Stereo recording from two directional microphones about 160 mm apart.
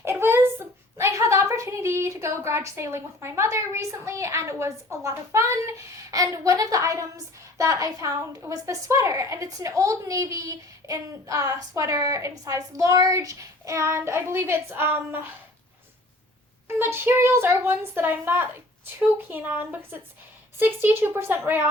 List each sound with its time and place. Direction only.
0.0 s a woman's voice: 15° right (ahead or behind)
16.6 s a child's voice: 15° right (ahead or behind)